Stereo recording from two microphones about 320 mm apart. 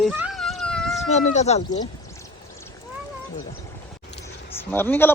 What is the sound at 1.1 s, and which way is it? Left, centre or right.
Speech, left.